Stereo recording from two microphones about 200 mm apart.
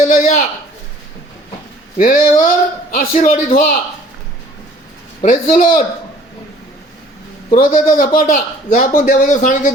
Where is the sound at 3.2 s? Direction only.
40° left (ahead or behind).